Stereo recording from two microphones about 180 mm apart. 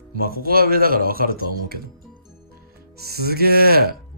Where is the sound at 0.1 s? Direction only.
55° right (ahead or behind).